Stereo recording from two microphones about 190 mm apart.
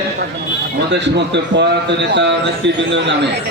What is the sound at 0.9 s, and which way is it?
A man's voice, 65° right (ahead or behind).